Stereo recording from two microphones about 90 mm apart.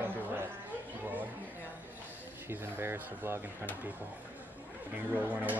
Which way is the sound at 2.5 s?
25° right (ahead or behind).